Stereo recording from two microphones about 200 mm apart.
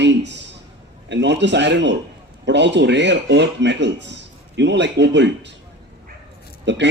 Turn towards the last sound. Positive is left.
turn(degrees=-60)  # may be behind; listen again after turning